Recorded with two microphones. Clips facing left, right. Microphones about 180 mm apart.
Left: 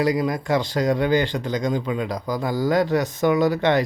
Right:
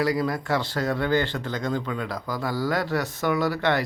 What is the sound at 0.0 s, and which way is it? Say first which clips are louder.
Speech: left 3 dB; 20° left (ahead or behind).